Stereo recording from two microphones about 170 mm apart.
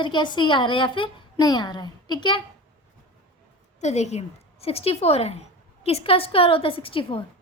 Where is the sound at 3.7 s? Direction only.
40° left (ahead or behind).